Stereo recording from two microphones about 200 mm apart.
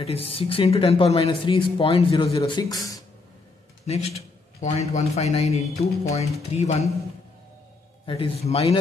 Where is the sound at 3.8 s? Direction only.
30° left (ahead or behind).